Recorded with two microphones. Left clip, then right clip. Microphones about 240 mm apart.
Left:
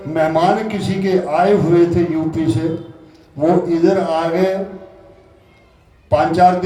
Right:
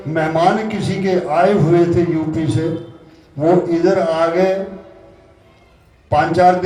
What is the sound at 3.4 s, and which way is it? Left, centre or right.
A man's voice, left.